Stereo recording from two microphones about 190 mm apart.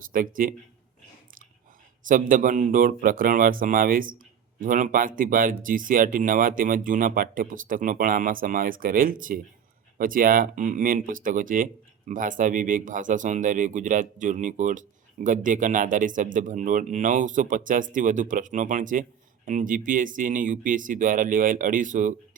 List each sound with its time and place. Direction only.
0.1 s speech: 45° right (ahead or behind)
2.0 s speech: 45° right (ahead or behind)